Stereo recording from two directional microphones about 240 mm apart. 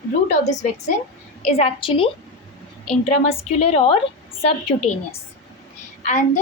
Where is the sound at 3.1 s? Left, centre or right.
Left.